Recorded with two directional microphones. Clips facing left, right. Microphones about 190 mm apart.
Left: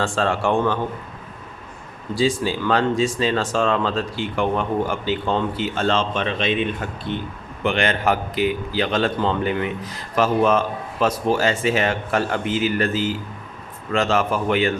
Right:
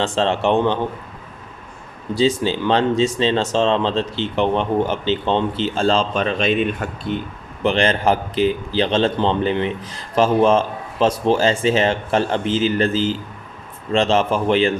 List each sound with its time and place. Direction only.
0.0 s speech: 20° right (ahead or behind)
2.1 s speech: 25° right (ahead or behind)